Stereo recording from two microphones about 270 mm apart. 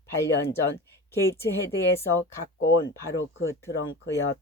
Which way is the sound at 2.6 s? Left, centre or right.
Left.